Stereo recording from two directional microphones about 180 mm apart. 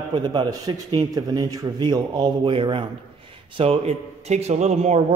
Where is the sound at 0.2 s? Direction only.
25° right (ahead or behind).